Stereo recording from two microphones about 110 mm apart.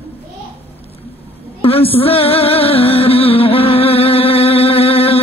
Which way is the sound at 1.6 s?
60° left (ahead or behind).